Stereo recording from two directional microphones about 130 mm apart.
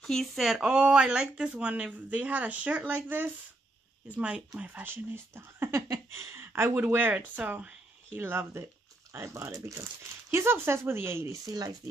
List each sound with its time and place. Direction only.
0.0 s speech: centre (ahead or behind); by 11.7 s 25° right (ahead or behind)